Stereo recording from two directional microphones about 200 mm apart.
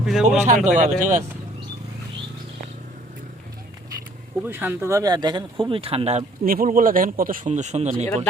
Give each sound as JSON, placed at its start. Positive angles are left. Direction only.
{"t": 0.0, "sound": "speech", "side_deg": 0}
{"t": 0.3, "sound": "speech", "side_deg": -40}
{"t": 4.4, "sound": "speech", "side_deg": -10}